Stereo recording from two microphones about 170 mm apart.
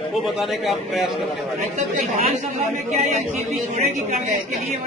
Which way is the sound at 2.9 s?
40° right (ahead or behind).